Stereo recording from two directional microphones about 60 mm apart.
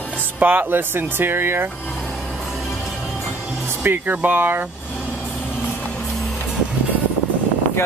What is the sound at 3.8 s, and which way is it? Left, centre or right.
Speech, right.